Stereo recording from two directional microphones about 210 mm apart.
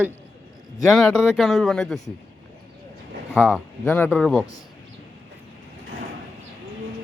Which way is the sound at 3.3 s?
Centre (ahead or behind).